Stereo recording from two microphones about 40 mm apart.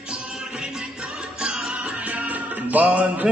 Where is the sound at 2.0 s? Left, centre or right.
Right.